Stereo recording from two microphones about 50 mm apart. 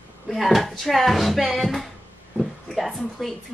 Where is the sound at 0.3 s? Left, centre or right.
Centre.